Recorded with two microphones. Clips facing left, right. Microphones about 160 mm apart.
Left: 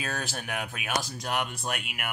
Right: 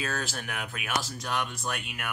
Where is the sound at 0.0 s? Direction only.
15° left (ahead or behind).